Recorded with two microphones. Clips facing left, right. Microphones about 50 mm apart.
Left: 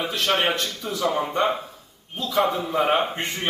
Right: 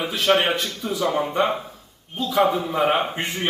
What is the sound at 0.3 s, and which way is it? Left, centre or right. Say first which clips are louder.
Speech: right 4 dB; right.